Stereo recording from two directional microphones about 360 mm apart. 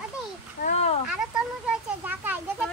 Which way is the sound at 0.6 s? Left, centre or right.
Centre.